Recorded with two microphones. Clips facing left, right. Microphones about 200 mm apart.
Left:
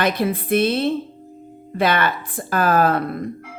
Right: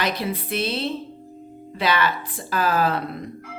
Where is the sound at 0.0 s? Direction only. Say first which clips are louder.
Left 5 dB; 55° left (ahead or behind).